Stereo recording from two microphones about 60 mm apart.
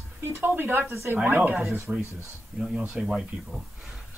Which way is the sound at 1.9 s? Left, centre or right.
Centre.